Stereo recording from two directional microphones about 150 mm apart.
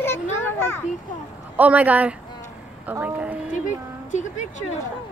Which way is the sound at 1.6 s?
10° right (ahead or behind).